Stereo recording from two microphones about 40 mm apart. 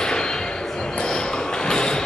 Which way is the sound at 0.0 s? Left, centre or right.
Centre.